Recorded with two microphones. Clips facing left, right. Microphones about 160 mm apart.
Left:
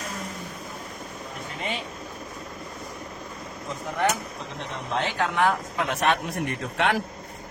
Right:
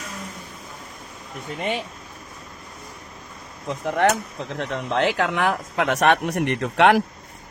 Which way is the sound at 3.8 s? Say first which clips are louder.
Right 6 dB; 70° right (ahead or behind).